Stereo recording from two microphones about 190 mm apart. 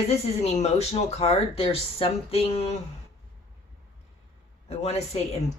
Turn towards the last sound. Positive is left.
turn(degrees=35)  # may be behind; listen again after turning